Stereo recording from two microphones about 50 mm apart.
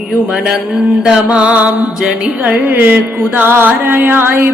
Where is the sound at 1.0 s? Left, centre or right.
Centre.